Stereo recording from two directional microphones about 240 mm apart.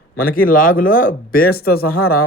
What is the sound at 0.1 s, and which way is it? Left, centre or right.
Speech, left.